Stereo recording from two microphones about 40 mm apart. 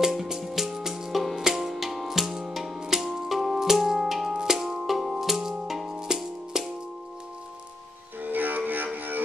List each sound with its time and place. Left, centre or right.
0.0 s music: centre
8.2 s music: right